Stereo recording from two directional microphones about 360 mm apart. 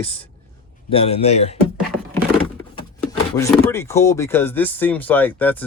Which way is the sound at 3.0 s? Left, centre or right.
Centre.